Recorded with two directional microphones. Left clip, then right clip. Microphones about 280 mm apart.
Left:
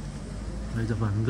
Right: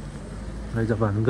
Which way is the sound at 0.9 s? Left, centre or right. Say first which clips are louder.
Right 10 dB; right.